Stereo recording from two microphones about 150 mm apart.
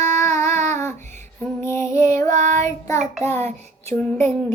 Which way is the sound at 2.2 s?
55° right (ahead or behind).